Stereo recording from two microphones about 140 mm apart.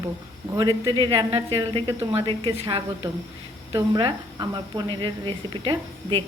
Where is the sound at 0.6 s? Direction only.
30° right (ahead or behind).